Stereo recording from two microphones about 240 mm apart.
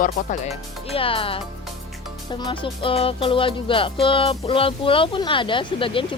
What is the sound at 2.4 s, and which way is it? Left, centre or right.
Music, left.